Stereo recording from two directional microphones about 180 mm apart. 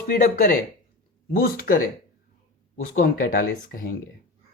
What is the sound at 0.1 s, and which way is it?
Speech, 50° left (ahead or behind).